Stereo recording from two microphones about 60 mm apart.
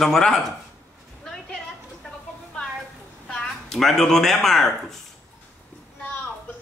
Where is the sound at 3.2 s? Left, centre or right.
Centre.